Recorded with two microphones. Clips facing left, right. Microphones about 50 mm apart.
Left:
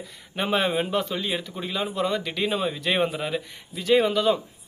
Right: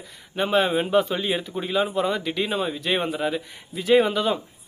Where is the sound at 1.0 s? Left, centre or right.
Centre.